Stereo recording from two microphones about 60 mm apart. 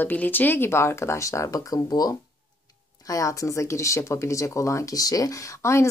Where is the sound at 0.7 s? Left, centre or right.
Left.